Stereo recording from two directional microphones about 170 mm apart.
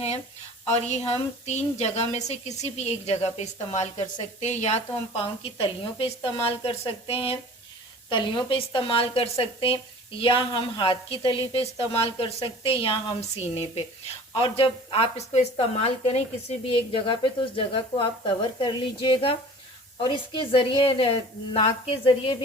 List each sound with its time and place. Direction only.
0.9 s a woman's voice: 40° left (ahead or behind)